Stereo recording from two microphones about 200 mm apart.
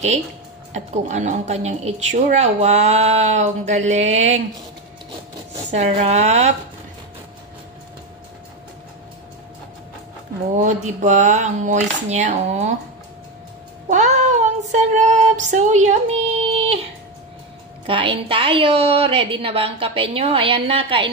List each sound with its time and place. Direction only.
0.7 s a woman's voice: 35° right (ahead or behind)
5.7 s a woman's voice: 35° right (ahead or behind)
10.6 s a woman's voice: 40° right (ahead or behind)
13.8 s a woman's voice: 35° right (ahead or behind)
17.8 s a woman's voice: 25° right (ahead or behind)